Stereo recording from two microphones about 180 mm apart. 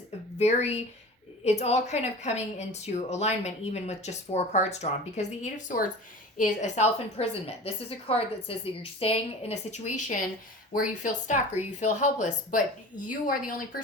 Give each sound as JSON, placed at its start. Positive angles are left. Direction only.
{"t": 0.3, "sound": "a woman's voice", "side_deg": 35}